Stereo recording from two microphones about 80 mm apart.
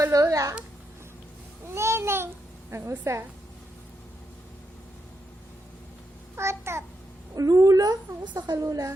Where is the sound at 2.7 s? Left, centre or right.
Right.